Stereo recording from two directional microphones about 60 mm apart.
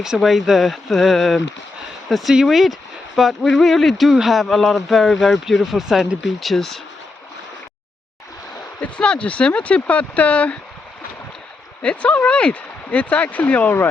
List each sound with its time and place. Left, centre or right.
0.0 s speech: centre
8.8 s speech: centre
11.8 s speech: centre